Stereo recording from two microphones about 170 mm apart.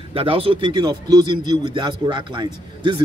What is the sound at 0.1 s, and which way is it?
A man's voice, 30° right (ahead or behind).